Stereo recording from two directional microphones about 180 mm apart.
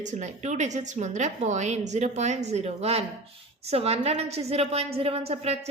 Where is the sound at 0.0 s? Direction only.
40° right (ahead or behind).